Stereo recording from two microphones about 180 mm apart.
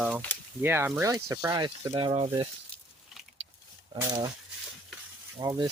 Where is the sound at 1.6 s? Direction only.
25° right (ahead or behind).